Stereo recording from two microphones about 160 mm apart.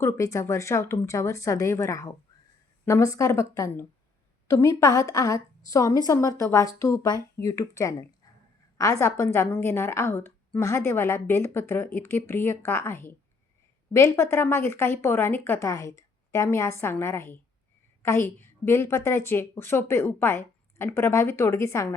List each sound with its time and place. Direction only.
0.0 s a woman's voice: 20° left (ahead or behind)